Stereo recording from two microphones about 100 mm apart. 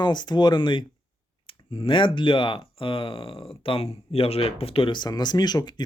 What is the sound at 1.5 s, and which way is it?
Clicking, 60° left (ahead or behind).